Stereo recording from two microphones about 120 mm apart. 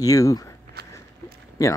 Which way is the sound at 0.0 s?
30° left (ahead or behind).